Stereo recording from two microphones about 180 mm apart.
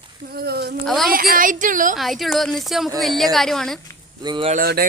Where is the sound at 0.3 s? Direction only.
60° right (ahead or behind).